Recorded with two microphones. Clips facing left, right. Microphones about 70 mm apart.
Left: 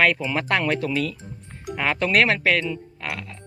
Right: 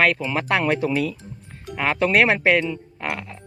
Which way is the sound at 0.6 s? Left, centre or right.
Centre.